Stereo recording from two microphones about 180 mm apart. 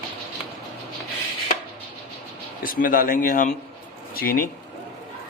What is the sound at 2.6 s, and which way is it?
A man's voice, 50° left (ahead or behind).